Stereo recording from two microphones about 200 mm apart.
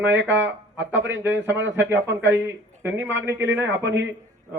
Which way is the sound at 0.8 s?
65° right (ahead or behind).